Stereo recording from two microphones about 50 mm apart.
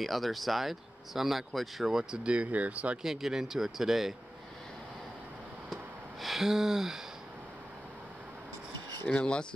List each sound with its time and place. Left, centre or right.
0.0 s speech: centre; by 3.0 s right
3.0 s speech: centre
6.2 s speech: centre
9.2 s speech: centre